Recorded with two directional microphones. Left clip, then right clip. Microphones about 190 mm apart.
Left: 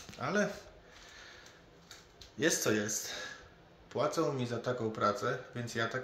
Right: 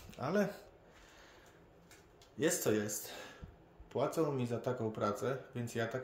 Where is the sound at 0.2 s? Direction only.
30° right (ahead or behind).